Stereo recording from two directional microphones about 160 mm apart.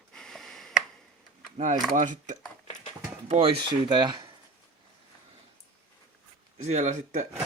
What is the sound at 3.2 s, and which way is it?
Speech, 40° right (ahead or behind).